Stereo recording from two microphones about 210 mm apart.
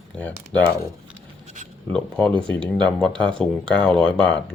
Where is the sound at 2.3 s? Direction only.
25° right (ahead or behind).